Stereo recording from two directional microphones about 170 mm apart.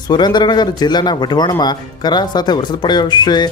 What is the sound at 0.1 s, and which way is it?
Speech, 25° left (ahead or behind).